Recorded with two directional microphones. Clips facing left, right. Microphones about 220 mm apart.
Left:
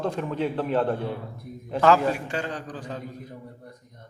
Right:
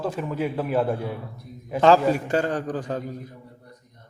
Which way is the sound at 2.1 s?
45° right (ahead or behind).